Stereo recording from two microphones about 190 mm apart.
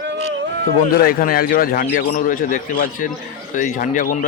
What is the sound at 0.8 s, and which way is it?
A man's voice, 50° left (ahead or behind).